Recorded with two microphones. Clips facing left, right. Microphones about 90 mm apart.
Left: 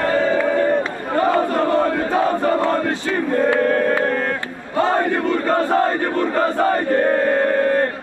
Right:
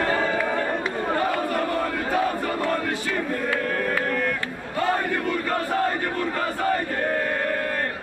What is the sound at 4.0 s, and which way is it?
Battle cry, 40° left (ahead or behind).